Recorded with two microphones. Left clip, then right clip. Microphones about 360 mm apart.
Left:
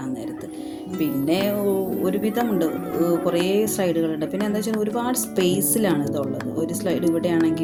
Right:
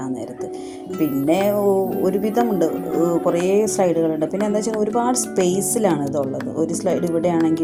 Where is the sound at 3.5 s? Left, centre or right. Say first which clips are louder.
Right 4 dB; left.